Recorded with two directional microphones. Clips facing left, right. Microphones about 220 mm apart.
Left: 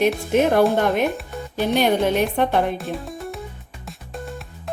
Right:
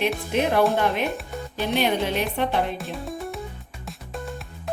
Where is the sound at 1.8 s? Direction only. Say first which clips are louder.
Left 5 dB; 50° left (ahead or behind).